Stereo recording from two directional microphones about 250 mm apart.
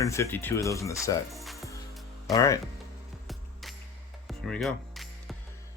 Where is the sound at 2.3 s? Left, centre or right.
Centre.